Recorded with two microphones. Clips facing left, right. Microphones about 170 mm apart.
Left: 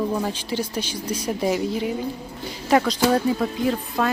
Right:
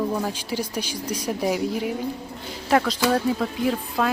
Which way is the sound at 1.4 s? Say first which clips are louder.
Left 1 dB; centre (ahead or behind).